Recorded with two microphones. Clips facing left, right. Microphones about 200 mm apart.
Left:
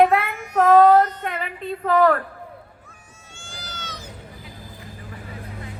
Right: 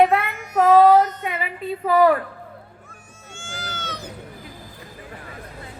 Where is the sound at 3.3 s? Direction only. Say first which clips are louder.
Right 5 dB; 50° right (ahead or behind).